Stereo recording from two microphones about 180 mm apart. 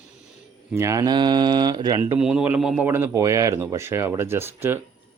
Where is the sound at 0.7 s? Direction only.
15° right (ahead or behind).